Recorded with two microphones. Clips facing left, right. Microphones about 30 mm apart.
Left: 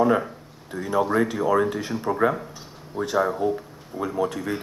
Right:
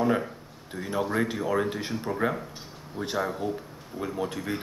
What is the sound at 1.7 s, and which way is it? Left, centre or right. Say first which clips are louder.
Speech: left 4 dB; centre.